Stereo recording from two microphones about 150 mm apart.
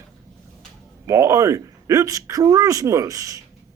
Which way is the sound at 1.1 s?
20° right (ahead or behind).